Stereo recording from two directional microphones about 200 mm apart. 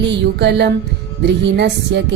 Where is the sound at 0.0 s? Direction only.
60° right (ahead or behind).